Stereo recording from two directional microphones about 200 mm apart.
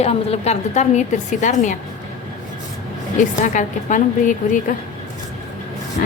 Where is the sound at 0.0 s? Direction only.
30° left (ahead or behind).